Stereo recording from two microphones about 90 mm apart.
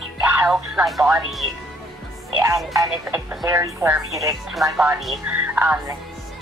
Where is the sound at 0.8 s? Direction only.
Centre (ahead or behind).